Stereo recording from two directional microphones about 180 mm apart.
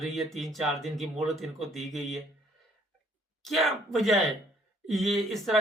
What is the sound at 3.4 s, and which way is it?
Speech, centre (ahead or behind).